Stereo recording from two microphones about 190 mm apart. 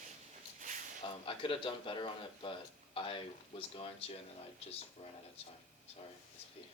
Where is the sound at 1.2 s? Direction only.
25° left (ahead or behind).